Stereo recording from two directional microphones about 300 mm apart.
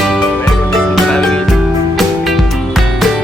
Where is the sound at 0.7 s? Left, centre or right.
Centre.